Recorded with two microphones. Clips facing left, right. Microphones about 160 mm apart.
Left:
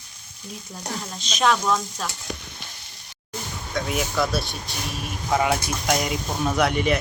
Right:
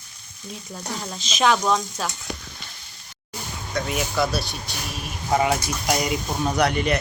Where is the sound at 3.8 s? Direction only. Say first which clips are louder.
Even; centre (ahead or behind).